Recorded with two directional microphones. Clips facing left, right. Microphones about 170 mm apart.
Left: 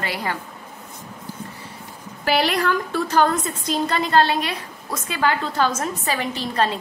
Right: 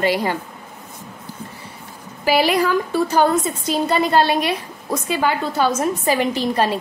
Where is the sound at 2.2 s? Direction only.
5° right (ahead or behind).